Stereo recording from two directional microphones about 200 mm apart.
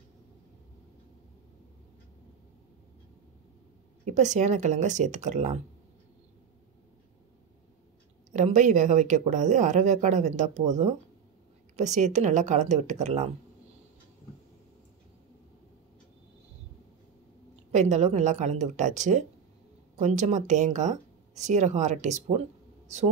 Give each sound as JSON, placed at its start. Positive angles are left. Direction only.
{"t": 4.0, "sound": "speech", "side_deg": -35}
{"t": 8.3, "sound": "speech", "side_deg": -40}
{"t": 17.6, "sound": "speech", "side_deg": -35}